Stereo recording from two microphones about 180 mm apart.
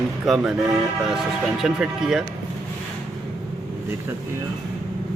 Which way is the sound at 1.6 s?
5° right (ahead or behind).